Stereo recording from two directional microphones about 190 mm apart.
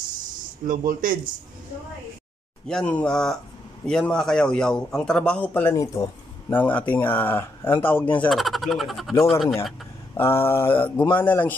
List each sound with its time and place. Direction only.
0.7 s speech: 45° right (ahead or behind)
2.7 s a man's voice: 5° left (ahead or behind)
10.1 s speech: 10° left (ahead or behind)